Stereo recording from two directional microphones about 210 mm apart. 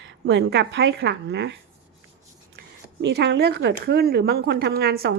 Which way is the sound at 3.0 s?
55° right (ahead or behind).